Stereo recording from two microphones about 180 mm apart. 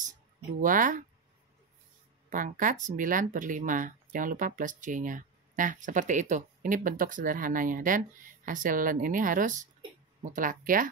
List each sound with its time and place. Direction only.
0.6 s speech: 50° right (ahead or behind)
2.2 s speech: 50° right (ahead or behind)